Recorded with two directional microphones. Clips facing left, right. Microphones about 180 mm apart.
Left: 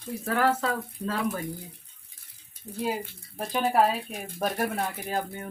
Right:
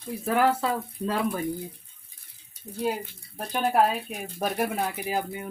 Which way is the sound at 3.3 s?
Centre (ahead or behind).